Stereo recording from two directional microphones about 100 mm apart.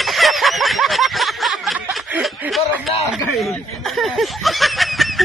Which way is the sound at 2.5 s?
Centre (ahead or behind).